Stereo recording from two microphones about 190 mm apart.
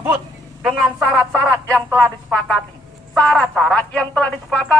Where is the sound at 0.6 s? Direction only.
Centre (ahead or behind).